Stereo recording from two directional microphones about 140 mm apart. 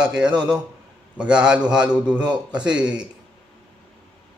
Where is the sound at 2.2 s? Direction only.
30° right (ahead or behind).